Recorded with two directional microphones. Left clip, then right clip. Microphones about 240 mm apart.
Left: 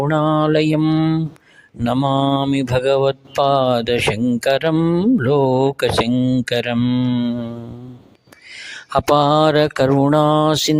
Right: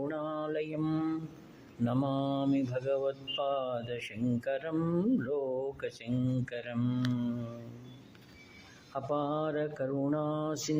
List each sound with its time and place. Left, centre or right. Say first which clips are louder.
0.0 s speech: left 19 dB; left
8.9 s speech: left 19 dB; left